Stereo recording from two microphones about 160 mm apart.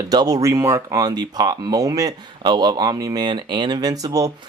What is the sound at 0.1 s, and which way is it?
Speech, 25° right (ahead or behind).